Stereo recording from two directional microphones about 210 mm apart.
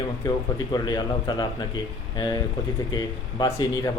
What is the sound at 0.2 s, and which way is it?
Speech, 20° left (ahead or behind).